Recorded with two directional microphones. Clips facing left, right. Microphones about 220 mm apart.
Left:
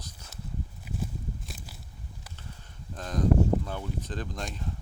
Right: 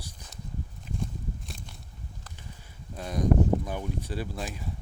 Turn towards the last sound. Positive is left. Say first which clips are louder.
# right 2 dB
turn(degrees=-5)  # may be behind; listen again after turning